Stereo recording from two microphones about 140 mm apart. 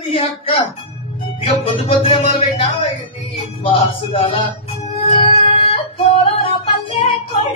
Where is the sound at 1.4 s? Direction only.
45° left (ahead or behind).